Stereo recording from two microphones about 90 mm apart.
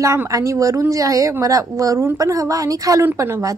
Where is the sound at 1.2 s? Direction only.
40° right (ahead or behind).